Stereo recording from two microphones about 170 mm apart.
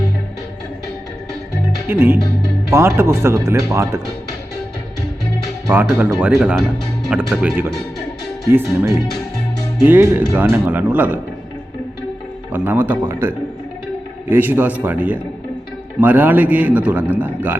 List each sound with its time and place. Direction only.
1.9 s a man's voice: 15° right (ahead or behind)
5.6 s a man's voice: 10° right (ahead or behind)
12.5 s a man's voice: 10° right (ahead or behind)